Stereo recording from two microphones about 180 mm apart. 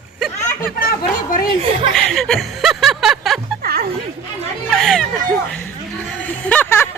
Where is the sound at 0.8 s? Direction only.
55° left (ahead or behind).